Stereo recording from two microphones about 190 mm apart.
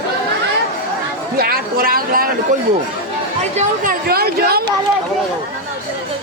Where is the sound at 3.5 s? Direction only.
45° right (ahead or behind).